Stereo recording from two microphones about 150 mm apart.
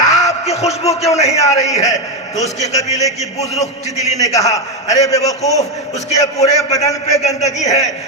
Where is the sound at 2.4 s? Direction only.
50° left (ahead or behind).